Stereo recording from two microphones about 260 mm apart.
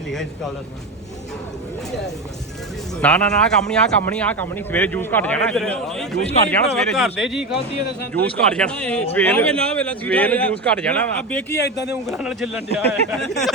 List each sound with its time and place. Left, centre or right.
3.0 s speech: centre
6.1 s speech: left
6.7 s speech: centre
11.5 s speech: left
12.0 s speech: centre